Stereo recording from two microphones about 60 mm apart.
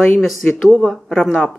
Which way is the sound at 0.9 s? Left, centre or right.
Centre.